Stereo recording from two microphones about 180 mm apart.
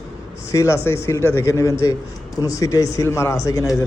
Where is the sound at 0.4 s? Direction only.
15° left (ahead or behind).